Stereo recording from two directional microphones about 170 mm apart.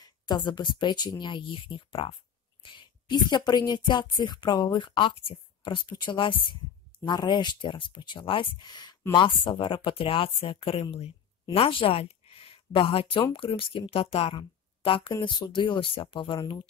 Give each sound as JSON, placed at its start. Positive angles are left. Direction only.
{"t": 0.0, "sound": "speech", "side_deg": 25}